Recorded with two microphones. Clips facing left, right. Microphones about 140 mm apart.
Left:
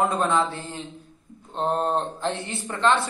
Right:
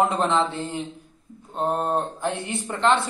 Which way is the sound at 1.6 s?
10° right (ahead or behind).